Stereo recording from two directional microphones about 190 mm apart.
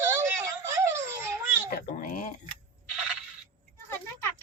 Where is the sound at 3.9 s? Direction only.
10° left (ahead or behind).